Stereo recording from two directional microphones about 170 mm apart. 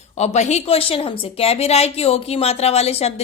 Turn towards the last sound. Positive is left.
turn(degrees=40)  # may be behind; listen again after turning